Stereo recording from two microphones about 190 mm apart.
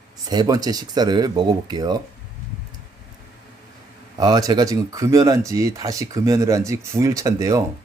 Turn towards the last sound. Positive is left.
turn(degrees=-15)  # may be behind; listen again after turning